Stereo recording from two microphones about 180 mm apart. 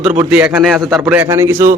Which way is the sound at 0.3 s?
10° right (ahead or behind).